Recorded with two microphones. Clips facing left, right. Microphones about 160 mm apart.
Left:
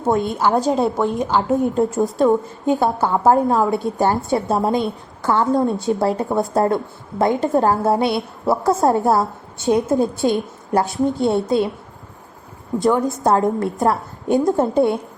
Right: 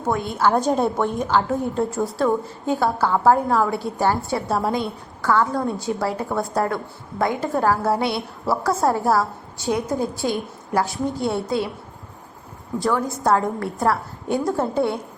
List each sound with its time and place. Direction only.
0.0 s a woman's voice: 25° left (ahead or behind)
0.5 s a woman's voice: centre (ahead or behind)
1.0 s a woman's voice: 20° left (ahead or behind)
12.8 s a woman's voice: 20° left (ahead or behind)